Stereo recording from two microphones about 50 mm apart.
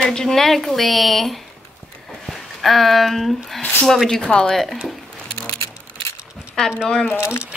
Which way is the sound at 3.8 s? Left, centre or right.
Centre.